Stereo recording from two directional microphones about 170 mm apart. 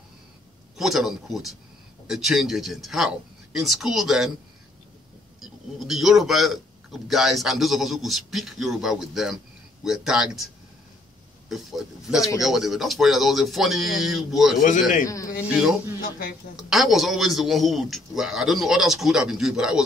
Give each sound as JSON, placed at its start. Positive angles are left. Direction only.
{"t": 0.7, "sound": "speech", "side_deg": 0}
{"t": 5.4, "sound": "speech", "side_deg": 0}
{"t": 15.0, "sound": "speech", "side_deg": 20}
{"t": 15.4, "sound": "speech", "side_deg": -5}